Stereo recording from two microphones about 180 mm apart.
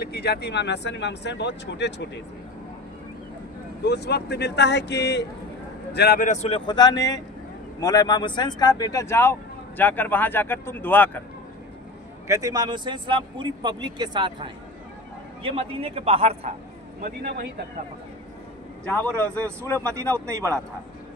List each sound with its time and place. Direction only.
0.0 s speech: 65° left (ahead or behind)
3.8 s a man's voice: 65° left (ahead or behind)
6.2 s speech: 40° left (ahead or behind); by 11.2 s 10° left (ahead or behind)
12.3 s a man's voice: 20° right (ahead or behind); by 16.5 s 35° right (ahead or behind)
17.0 s a man's voice: 60° right (ahead or behind)
18.9 s speech: 5° left (ahead or behind)
20.2 s a man's voice: 15° right (ahead or behind)